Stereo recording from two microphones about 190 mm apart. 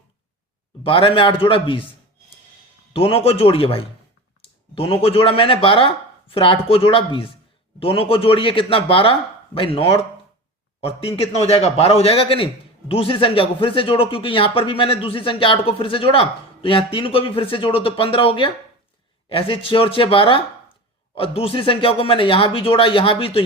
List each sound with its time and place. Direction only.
0.9 s speech: 25° left (ahead or behind)
2.9 s speech: 30° left (ahead or behind)